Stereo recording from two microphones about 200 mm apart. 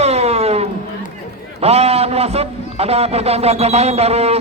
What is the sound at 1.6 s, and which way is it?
A man's voice, 30° right (ahead or behind).